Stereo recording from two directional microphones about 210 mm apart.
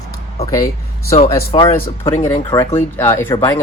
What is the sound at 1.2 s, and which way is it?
Speech, 20° left (ahead or behind).